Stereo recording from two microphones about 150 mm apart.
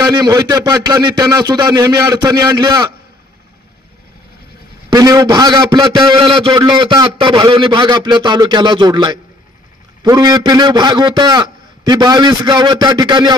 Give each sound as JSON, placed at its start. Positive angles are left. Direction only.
{"t": 0.0, "sound": "a man's voice", "side_deg": -25}
{"t": 4.8, "sound": "a man's voice", "side_deg": -25}